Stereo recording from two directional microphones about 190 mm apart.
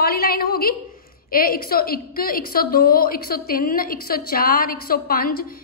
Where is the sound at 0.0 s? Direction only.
50° left (ahead or behind).